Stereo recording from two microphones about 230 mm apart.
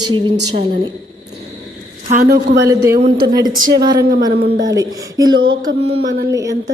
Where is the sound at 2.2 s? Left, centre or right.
Right.